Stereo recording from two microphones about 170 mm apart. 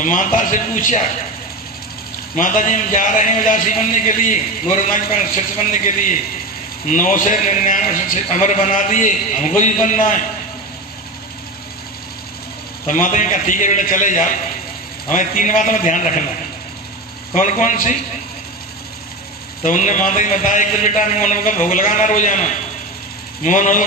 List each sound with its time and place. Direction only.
0.0 s a man's voice: 50° left (ahead or behind)
2.3 s a man's voice: 50° left (ahead or behind)
12.8 s a man's voice: 50° left (ahead or behind)
17.3 s a man's voice: 45° left (ahead or behind)
19.6 s a man's voice: 50° left (ahead or behind)